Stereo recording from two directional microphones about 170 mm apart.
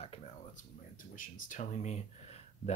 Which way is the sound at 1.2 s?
45° left (ahead or behind).